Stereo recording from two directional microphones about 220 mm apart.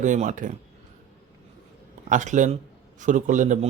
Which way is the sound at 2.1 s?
35° right (ahead or behind).